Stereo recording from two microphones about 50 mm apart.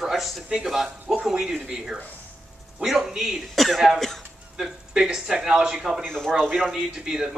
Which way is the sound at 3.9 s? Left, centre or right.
Centre.